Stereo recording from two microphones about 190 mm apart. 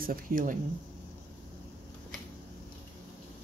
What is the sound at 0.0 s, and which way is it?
Speech, 50° right (ahead or behind).